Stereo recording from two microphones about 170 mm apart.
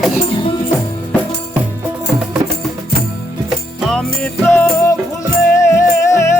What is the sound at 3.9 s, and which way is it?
Music, 5° left (ahead or behind).